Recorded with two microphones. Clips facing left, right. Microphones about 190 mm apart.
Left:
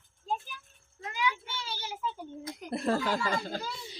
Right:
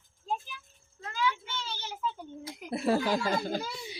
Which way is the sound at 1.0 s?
15° left (ahead or behind).